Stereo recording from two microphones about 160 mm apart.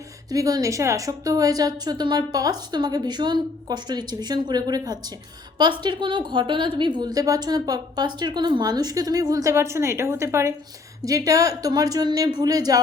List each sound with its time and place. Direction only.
0.3 s a woman's voice: 20° right (ahead or behind)